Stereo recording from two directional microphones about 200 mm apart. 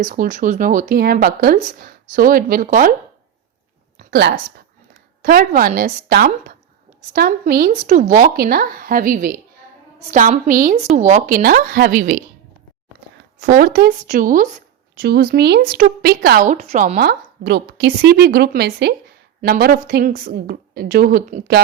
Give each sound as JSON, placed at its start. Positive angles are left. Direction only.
{"t": 0.0, "sound": "speech", "side_deg": -40}
{"t": 3.9, "sound": "a sound", "side_deg": -55}
{"t": 5.2, "sound": "a woman's voice", "side_deg": -45}
{"t": 13.4, "sound": "a woman's voice", "side_deg": -40}